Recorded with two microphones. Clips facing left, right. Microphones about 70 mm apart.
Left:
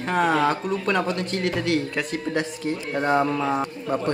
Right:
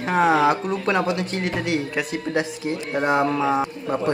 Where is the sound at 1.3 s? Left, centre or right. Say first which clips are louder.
Left 1 dB; right.